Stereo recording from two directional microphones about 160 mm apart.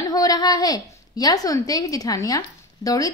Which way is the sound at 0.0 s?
25° left (ahead or behind).